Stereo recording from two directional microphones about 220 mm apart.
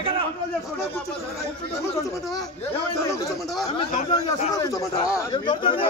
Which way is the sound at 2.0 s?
15° left (ahead or behind).